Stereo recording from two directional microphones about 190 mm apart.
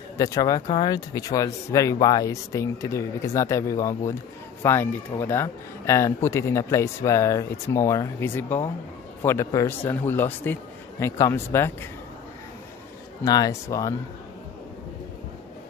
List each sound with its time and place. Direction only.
0.2 s speech: 20° left (ahead or behind)
13.2 s speech: 20° left (ahead or behind)